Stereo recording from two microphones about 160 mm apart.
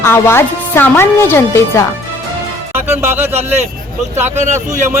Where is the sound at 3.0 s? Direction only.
15° right (ahead or behind).